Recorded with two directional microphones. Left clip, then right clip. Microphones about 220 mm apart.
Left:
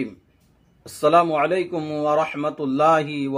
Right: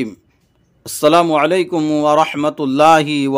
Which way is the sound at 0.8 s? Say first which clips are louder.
Right 5 dB; 50° right (ahead or behind).